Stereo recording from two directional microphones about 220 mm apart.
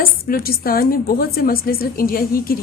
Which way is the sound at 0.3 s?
40° left (ahead or behind).